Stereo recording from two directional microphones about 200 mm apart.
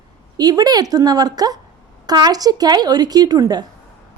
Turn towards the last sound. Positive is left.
turn(degrees=-20)  # may be behind; listen again after turning